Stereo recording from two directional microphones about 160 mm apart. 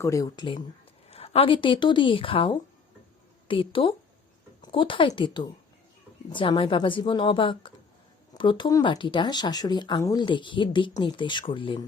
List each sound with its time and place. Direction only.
0.0 s speech: 20° left (ahead or behind)